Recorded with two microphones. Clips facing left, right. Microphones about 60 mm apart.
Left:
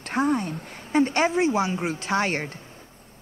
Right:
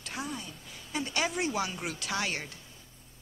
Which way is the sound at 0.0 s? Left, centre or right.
Left.